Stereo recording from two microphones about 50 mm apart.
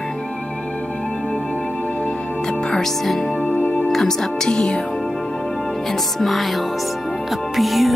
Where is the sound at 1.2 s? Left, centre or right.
Left.